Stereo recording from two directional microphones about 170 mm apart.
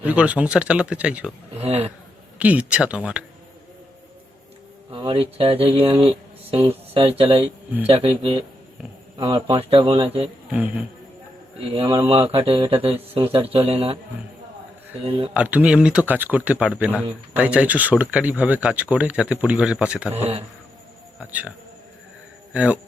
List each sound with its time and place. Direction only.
0.0 s speech: 10° right (ahead or behind)
1.5 s speech: 35° right (ahead or behind)
2.4 s speech: 10° right (ahead or behind)
4.9 s speech: 30° right (ahead or behind)
11.7 s speech: 30° right (ahead or behind)
15.3 s speech: 10° right (ahead or behind)
20.1 s speech: 40° right (ahead or behind)
21.2 s speech: 10° right (ahead or behind)
22.5 s speech: 10° right (ahead or behind)